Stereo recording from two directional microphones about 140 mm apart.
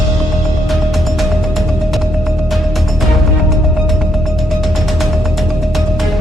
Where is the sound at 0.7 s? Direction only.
Centre (ahead or behind).